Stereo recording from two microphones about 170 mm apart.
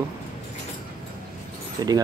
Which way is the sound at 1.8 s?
20° right (ahead or behind).